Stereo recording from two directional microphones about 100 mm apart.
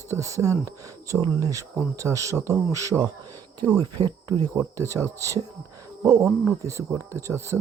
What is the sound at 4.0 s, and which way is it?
Speech, 45° right (ahead or behind).